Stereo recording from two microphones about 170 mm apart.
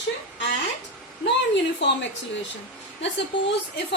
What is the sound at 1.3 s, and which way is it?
Speech, 90° left.